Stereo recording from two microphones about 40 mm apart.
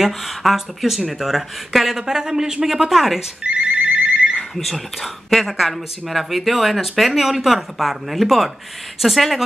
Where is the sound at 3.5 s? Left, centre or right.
Right.